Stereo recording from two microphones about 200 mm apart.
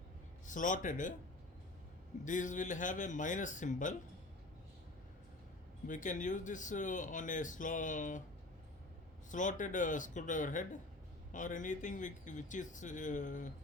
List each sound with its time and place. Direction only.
0.4 s speech: 40° left (ahead or behind)
2.2 s speech: 40° left (ahead or behind)
5.9 s speech: 40° left (ahead or behind)
9.3 s speech: 40° left (ahead or behind)